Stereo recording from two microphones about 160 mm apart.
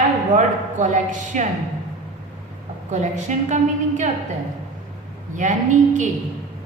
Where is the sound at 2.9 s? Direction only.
45° right (ahead or behind).